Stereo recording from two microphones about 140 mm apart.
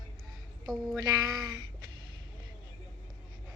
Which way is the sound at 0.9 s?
30° right (ahead or behind).